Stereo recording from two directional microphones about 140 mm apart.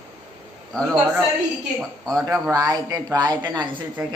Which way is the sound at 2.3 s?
25° right (ahead or behind).